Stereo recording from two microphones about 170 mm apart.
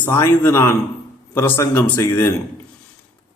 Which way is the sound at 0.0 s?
15° left (ahead or behind).